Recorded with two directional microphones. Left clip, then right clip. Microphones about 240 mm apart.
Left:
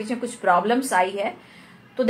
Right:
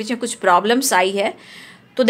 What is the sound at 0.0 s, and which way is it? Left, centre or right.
A woman's voice, right.